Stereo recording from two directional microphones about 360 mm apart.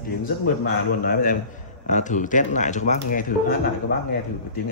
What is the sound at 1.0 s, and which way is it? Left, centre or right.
Speech, left.